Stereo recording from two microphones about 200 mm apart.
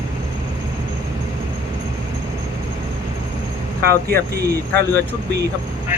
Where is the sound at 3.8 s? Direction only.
50° right (ahead or behind).